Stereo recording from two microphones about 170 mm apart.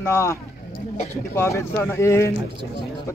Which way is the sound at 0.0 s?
15° left (ahead or behind).